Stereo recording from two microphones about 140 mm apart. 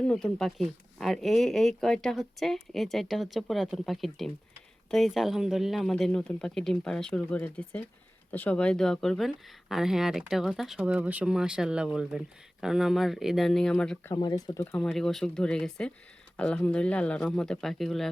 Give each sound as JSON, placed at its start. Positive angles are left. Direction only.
{"t": 0.0, "sound": "speech", "side_deg": 5}
{"t": 14.1, "sound": "speech", "side_deg": 30}
{"t": 14.7, "sound": "speech", "side_deg": 5}